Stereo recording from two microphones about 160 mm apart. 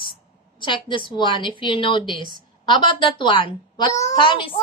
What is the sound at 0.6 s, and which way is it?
A woman's voice, 30° left (ahead or behind).